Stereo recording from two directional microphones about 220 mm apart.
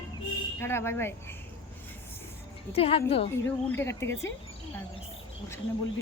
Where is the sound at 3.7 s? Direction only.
10° left (ahead or behind).